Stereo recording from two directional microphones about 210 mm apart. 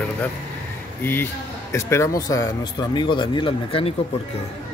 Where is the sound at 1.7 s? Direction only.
15° left (ahead or behind).